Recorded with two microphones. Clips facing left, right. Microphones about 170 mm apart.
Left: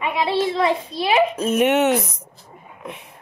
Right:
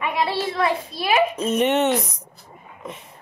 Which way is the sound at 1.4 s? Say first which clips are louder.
Left 2 dB; 5° left (ahead or behind).